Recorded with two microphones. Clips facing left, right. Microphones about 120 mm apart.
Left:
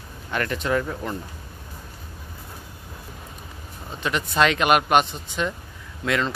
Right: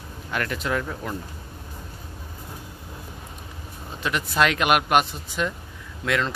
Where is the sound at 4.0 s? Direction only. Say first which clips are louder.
Left 1 dB; 5° right (ahead or behind).